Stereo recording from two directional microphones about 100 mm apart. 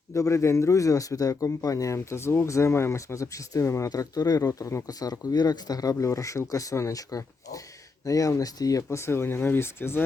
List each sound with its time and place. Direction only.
0.1 s speech: 30° left (ahead or behind)